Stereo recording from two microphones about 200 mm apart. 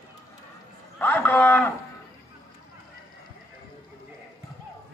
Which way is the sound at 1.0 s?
10° left (ahead or behind).